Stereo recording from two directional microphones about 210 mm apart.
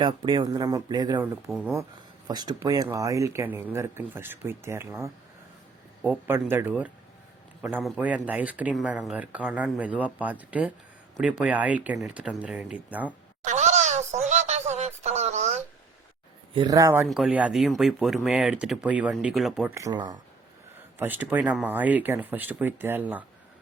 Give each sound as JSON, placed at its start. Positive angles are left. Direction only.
{"t": 0.0, "sound": "speech", "side_deg": -20}
{"t": 1.5, "sound": "speech", "side_deg": 0}
{"t": 2.2, "sound": "speech", "side_deg": -20}
{"t": 13.4, "sound": "a sound", "side_deg": -35}
{"t": 16.6, "sound": "speech", "side_deg": -15}
{"t": 19.7, "sound": "speech", "side_deg": -15}
{"t": 21.0, "sound": "speech", "side_deg": -10}